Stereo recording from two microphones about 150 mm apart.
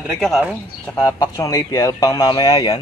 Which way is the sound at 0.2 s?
5° right (ahead or behind).